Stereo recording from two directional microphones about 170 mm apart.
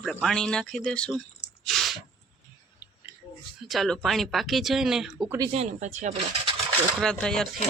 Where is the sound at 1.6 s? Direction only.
Centre (ahead or behind).